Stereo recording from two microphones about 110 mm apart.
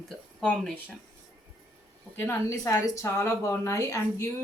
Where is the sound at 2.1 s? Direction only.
25° left (ahead or behind).